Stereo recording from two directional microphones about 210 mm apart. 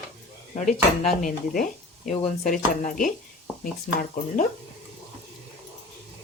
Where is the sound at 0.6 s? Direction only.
35° left (ahead or behind).